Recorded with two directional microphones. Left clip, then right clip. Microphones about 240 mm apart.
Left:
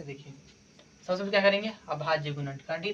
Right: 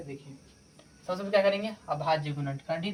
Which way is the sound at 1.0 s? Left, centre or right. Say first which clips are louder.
Left 1 dB; left.